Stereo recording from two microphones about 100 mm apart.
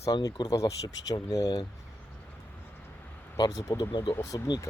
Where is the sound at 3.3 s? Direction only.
40° left (ahead or behind).